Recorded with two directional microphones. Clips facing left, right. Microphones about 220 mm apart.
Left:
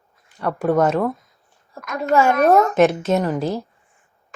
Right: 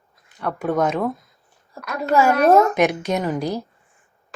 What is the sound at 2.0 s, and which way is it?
Speech, centre (ahead or behind).